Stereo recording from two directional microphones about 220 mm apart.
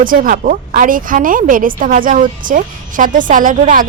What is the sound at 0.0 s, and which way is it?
Speech, 40° right (ahead or behind).